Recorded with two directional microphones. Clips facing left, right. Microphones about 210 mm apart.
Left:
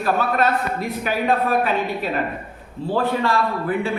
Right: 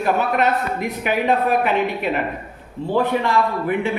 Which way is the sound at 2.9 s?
20° right (ahead or behind).